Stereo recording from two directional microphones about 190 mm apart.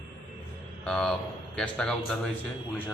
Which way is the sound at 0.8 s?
5° left (ahead or behind).